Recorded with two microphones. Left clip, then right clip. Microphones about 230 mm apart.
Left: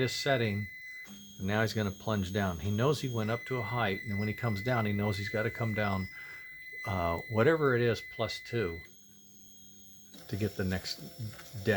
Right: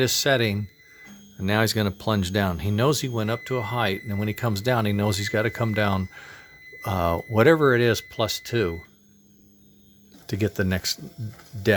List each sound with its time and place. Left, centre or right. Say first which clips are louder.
0.0 s speech: right 9 dB; right
10.2 s speech: right 10 dB; right